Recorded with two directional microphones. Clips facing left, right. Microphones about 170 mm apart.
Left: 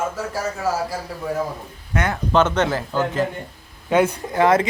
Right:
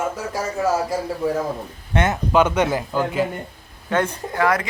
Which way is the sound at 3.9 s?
15° left (ahead or behind).